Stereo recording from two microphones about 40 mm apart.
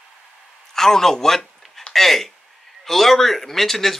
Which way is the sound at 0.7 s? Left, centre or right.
Centre.